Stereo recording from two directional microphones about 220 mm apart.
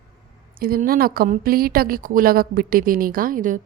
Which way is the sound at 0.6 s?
40° right (ahead or behind).